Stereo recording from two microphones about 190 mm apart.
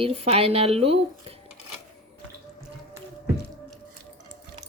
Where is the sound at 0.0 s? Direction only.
30° right (ahead or behind).